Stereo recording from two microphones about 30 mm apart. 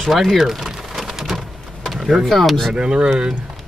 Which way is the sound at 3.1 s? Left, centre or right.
Right.